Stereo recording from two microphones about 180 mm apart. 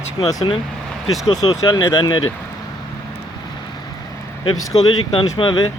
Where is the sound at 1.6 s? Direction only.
20° left (ahead or behind).